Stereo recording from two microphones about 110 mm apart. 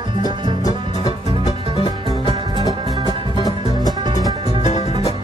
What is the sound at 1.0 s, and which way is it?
Music, 35° left (ahead or behind).